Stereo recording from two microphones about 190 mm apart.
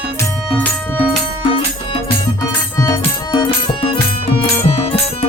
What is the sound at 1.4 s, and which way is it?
Music, 25° left (ahead or behind).